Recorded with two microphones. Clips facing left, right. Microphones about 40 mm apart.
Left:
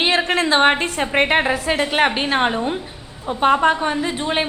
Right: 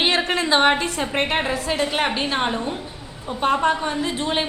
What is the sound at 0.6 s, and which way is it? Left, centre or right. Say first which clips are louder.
A woman's voice: left 2 dB; left.